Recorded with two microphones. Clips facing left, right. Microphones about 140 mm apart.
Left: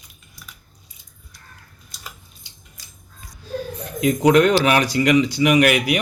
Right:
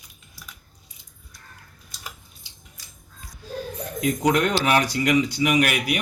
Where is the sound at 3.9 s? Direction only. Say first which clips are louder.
Left 6 dB; 90° left.